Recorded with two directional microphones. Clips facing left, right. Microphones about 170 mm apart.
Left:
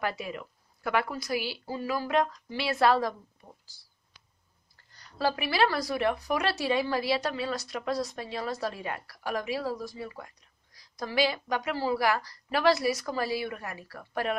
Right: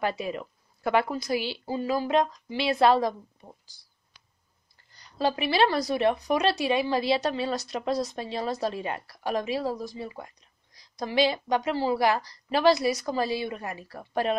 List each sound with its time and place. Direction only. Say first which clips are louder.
0.0 s a woman's voice: right 4 dB; 25° right (ahead or behind)
4.9 s a woman's voice: right 2 dB; 20° right (ahead or behind)